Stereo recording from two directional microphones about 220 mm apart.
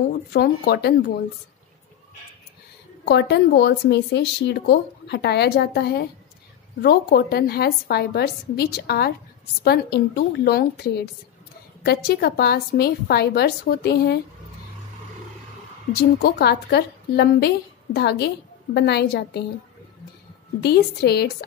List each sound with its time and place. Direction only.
0.3 s a woman's voice: 45° left (ahead or behind)
3.1 s a woman's voice: 50° left (ahead or behind)
15.9 s a woman's voice: 45° left (ahead or behind)
20.6 s a woman's voice: 45° left (ahead or behind)